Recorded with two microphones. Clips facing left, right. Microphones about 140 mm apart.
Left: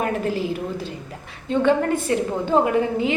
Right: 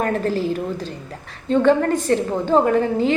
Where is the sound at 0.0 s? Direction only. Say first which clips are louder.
Right 2 dB; 10° left (ahead or behind).